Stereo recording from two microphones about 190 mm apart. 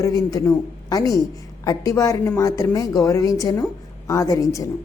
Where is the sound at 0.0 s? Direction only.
20° left (ahead or behind).